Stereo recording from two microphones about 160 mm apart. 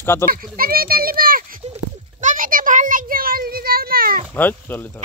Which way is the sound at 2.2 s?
60° right (ahead or behind).